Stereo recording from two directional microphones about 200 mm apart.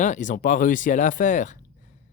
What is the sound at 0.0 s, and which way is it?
Speech, 40° left (ahead or behind).